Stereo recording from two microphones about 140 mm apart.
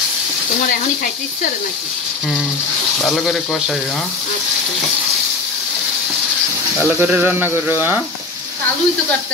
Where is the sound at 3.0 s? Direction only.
Centre (ahead or behind).